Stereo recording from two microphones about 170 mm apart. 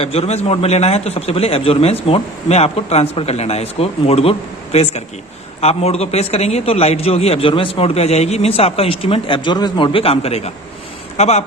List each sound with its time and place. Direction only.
0.0 s a man's voice: 35° left (ahead or behind)